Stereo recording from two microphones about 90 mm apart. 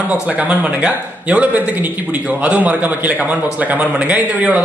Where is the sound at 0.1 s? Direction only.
15° right (ahead or behind).